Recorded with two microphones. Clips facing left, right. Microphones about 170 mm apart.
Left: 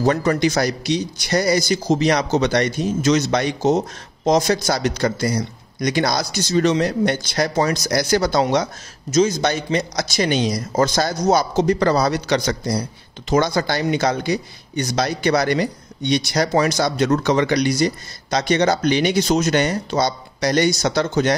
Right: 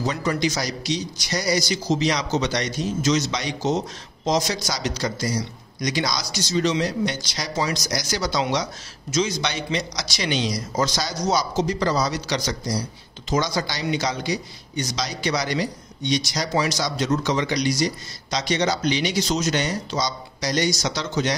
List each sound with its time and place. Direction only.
0.0 s a man's voice: 55° left (ahead or behind)